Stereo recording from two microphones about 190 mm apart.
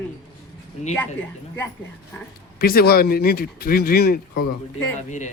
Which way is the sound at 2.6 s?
50° left (ahead or behind).